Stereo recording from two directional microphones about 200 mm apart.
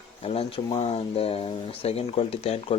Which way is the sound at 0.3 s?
30° left (ahead or behind).